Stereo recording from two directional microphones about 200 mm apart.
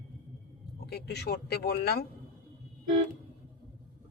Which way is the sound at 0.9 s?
55° left (ahead or behind).